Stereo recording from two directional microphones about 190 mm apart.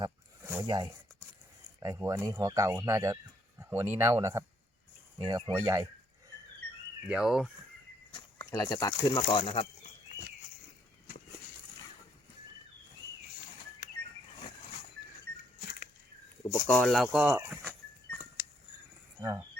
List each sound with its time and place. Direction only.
0.5 s speech: 20° right (ahead or behind)
7.1 s speech: 5° right (ahead or behind)
8.4 s speech: 20° left (ahead or behind)
16.5 s speech: 15° left (ahead or behind)
16.9 s speech: 5° right (ahead or behind)
17.6 s goat: 5° left (ahead or behind)
19.2 s speech: 20° right (ahead or behind)